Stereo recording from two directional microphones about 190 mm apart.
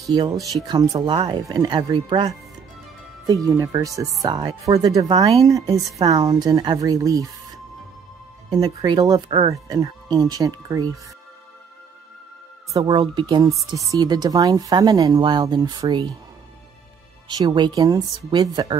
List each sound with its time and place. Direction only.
0.1 s speech: 25° right (ahead or behind)
0.4 s speech: centre (ahead or behind)
0.7 s speech: 25° right (ahead or behind)
8.5 s speech: 20° right (ahead or behind)
12.7 s speech: 20° right (ahead or behind)
17.3 s speech: 20° right (ahead or behind)